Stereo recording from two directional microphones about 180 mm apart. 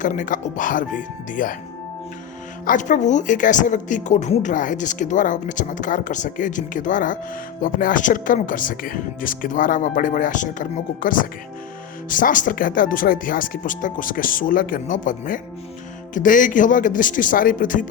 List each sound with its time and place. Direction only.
0.0 s speech: 45° left (ahead or behind)
2.6 s speech: 45° left (ahead or behind)